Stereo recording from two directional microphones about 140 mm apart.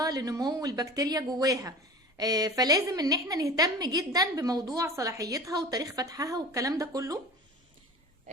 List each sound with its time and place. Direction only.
0.0 s a woman's voice: 25° right (ahead or behind)